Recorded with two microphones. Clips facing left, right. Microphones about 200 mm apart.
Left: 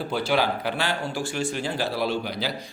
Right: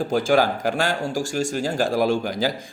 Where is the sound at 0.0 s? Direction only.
45° right (ahead or behind).